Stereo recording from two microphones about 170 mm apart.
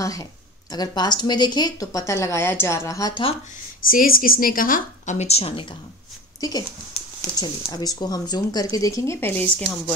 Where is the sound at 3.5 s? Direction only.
55° left (ahead or behind); by 6.6 s 25° left (ahead or behind).